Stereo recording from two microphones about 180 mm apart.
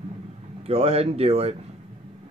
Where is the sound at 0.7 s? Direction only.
35° right (ahead or behind).